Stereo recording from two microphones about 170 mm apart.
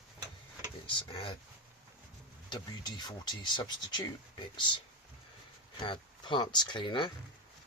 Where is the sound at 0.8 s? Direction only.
30° left (ahead or behind).